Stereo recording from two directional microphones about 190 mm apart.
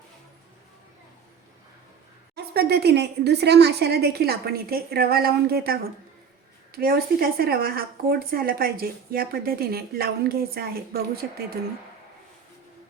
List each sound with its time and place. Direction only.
2.3 s speech: 60° right (ahead or behind)